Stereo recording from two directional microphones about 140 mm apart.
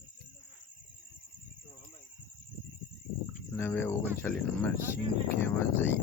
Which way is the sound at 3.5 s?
15° left (ahead or behind).